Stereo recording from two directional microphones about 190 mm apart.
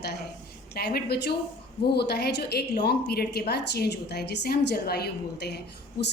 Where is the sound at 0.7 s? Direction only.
55° left (ahead or behind).